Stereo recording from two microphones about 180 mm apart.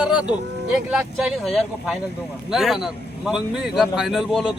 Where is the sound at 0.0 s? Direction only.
5° right (ahead or behind).